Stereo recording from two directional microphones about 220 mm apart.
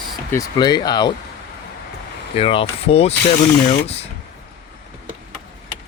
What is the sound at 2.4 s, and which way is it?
Speech, 25° left (ahead or behind).